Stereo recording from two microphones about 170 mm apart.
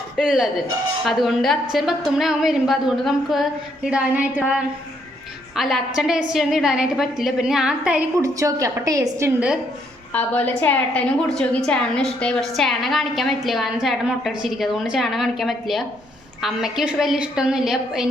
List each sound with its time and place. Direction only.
0.2 s a woman's voice: centre (ahead or behind)
8.2 s a woman's voice: 20° right (ahead or behind)
10.1 s a woman's voice: 10° left (ahead or behind)